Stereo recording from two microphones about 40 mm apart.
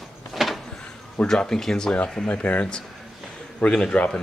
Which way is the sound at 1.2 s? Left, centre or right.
Centre.